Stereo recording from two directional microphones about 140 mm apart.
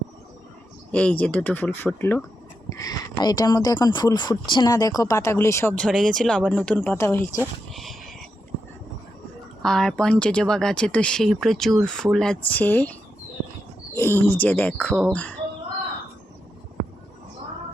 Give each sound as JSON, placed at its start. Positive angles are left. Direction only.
{"t": 0.9, "sound": "speech", "side_deg": 10}
{"t": 5.7, "sound": "speech", "side_deg": 5}
{"t": 7.7, "sound": "a sound", "side_deg": 0}
{"t": 9.6, "sound": "speech", "side_deg": 5}